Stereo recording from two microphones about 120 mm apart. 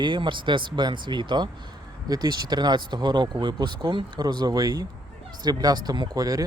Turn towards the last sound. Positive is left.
turn(degrees=-30)  # may be behind; listen again after turning